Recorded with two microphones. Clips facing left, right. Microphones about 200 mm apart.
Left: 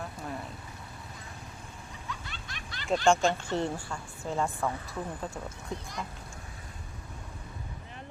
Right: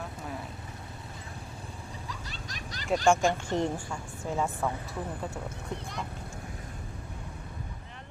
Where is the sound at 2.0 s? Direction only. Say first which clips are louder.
Right 1 dB; 35° right (ahead or behind).